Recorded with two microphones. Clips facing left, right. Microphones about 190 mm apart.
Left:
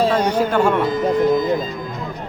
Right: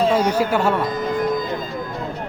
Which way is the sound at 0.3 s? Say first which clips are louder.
Left 2 dB; 10° right (ahead or behind).